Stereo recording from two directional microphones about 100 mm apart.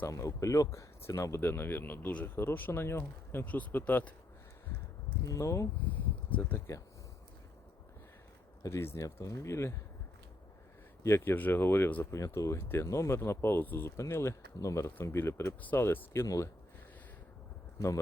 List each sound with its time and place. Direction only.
0.1 s speech: 30° left (ahead or behind); by 4.1 s 15° left (ahead or behind)
5.2 s speech: 30° left (ahead or behind)
6.7 s speech: 30° left (ahead or behind)
8.6 s speech: 30° left (ahead or behind)
11.0 s speech: 25° left (ahead or behind)
12.1 s speech: 30° left (ahead or behind)
16.2 s speech: 35° left (ahead or behind)
17.7 s speech: 35° left (ahead or behind)